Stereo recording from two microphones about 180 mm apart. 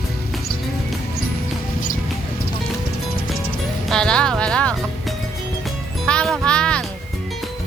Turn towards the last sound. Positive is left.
turn(degrees=5)  # may be behind; listen again after turning